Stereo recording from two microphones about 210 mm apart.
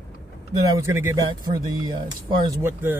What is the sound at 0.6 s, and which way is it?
Speech, 15° right (ahead or behind).